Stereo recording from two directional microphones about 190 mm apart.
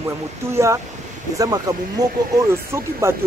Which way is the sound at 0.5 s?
15° right (ahead or behind).